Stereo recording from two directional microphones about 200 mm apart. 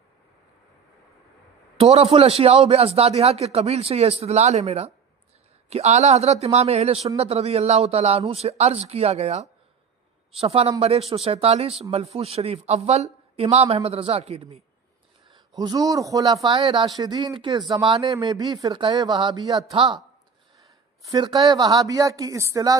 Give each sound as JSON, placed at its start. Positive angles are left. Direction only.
{"t": 1.8, "sound": "speech", "side_deg": -30}
{"t": 15.5, "sound": "speech", "side_deg": -20}
{"t": 20.6, "sound": "a sound", "side_deg": -15}
{"t": 21.4, "sound": "speech", "side_deg": -20}